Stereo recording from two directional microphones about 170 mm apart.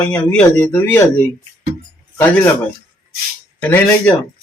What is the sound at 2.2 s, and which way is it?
Speech, 10° left (ahead or behind).